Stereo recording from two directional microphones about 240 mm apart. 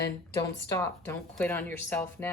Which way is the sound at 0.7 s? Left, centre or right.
Centre.